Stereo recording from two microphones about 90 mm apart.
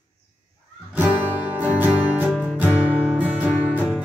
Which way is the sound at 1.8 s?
15° right (ahead or behind).